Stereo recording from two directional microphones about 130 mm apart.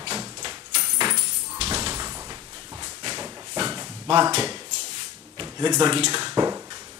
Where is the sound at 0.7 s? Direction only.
45° right (ahead or behind).